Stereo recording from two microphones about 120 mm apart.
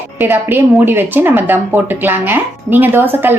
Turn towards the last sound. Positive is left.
turn(degrees=-20)  # may be behind; listen again after turning